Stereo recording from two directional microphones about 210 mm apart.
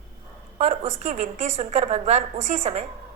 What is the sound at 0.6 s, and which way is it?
A woman's voice, 30° right (ahead or behind).